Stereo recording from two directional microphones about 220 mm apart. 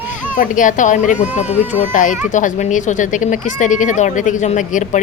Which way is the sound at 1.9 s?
35° left (ahead or behind).